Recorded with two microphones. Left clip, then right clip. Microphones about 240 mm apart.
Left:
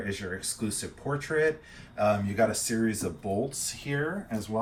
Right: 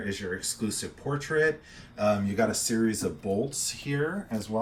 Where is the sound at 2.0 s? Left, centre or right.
Centre.